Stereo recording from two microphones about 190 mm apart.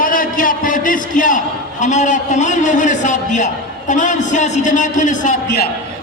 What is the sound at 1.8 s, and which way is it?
A man's voice, 40° left (ahead or behind).